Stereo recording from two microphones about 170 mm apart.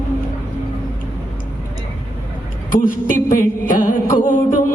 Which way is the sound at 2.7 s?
55° left (ahead or behind).